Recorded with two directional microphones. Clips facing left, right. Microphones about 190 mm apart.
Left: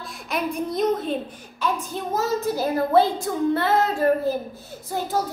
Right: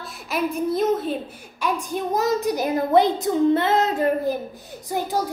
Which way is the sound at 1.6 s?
15° right (ahead or behind).